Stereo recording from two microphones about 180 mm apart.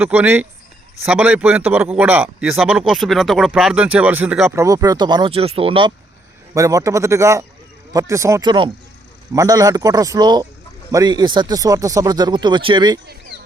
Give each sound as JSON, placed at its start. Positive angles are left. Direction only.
{"t": 0.0, "sound": "a man's voice", "side_deg": -10}
{"t": 6.5, "sound": "a man's voice", "side_deg": -20}